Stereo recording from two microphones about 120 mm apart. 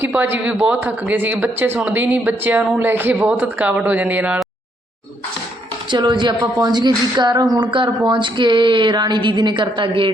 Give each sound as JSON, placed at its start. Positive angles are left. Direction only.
{"t": 0.0, "sound": "speech", "side_deg": -15}
{"t": 5.9, "sound": "speech", "side_deg": -40}